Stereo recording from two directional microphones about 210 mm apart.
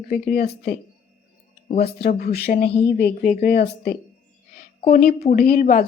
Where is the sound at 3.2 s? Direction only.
35° left (ahead or behind).